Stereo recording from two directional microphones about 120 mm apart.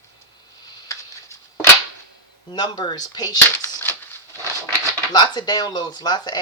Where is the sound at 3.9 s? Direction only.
20° left (ahead or behind).